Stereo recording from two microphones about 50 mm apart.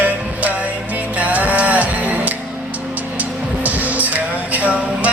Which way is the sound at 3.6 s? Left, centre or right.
Right.